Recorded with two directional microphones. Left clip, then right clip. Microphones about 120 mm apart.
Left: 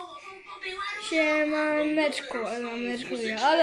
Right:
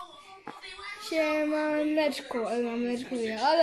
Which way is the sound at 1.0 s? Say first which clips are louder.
Left 3 dB; 10° right (ahead or behind).